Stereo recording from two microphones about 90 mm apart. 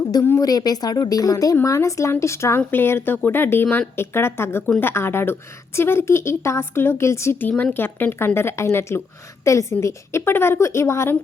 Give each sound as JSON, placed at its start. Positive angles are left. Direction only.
{"t": 0.3, "sound": "a woman's voice", "side_deg": 45}
{"t": 7.5, "sound": "a woman's voice", "side_deg": 20}